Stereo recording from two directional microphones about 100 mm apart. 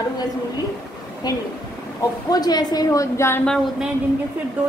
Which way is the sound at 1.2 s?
45° left (ahead or behind).